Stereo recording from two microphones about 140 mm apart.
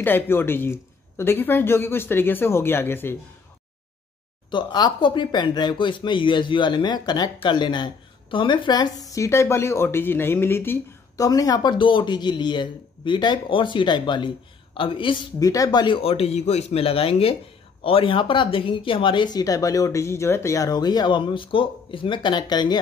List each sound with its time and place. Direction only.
0.0 s speech: 15° left (ahead or behind)
4.5 s a woman's voice: 35° left (ahead or behind)
15.3 s a woman's voice: 25° left (ahead or behind)